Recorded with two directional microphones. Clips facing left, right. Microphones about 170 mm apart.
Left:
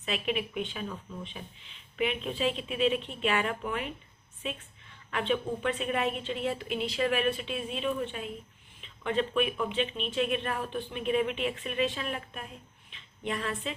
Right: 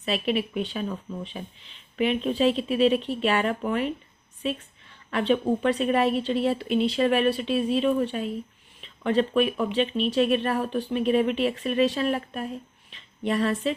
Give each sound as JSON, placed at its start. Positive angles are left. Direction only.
{"t": 0.0, "sound": "speech", "side_deg": -35}
{"t": 5.1, "sound": "a woman's voice", "side_deg": -35}